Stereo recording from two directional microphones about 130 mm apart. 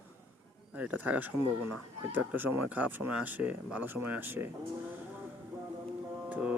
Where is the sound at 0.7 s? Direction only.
10° right (ahead or behind).